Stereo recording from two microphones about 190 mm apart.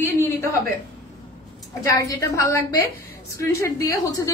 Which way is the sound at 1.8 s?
15° left (ahead or behind).